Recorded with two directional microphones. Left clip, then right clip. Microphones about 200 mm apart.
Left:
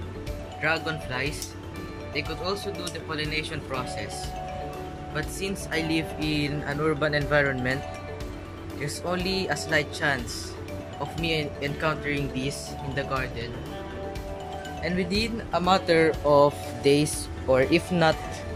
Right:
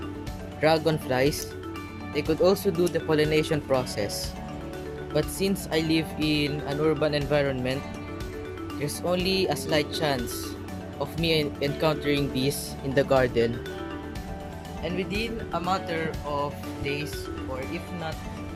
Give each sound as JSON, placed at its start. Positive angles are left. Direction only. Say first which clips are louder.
{"t": 0.6, "sound": "speech", "louder": "right 4 dB", "side_deg": -25}
{"t": 5.1, "sound": "speech", "louder": "right 5 dB", "side_deg": -20}
{"t": 8.8, "sound": "speech", "louder": "right 2 dB", "side_deg": -15}
{"t": 11.2, "sound": "speech", "louder": "right 3 dB", "side_deg": -15}
{"t": 14.8, "sound": "speech", "louder": "left 2 dB", "side_deg": 0}
{"t": 15.6, "sound": "speech", "louder": "left 7 dB", "side_deg": 10}
{"t": 16.0, "sound": "music", "louder": "left 10 dB", "side_deg": 25}
{"t": 17.5, "sound": "speech", "louder": "left 17 dB", "side_deg": 50}